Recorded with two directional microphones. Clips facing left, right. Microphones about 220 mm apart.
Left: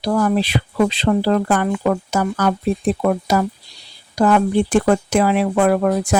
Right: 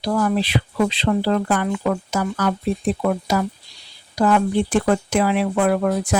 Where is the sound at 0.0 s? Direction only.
50° left (ahead or behind).